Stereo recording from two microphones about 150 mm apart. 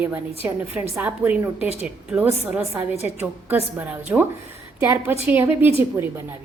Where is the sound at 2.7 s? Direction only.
10° right (ahead or behind).